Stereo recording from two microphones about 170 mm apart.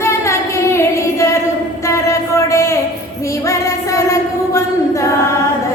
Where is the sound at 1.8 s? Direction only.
15° left (ahead or behind).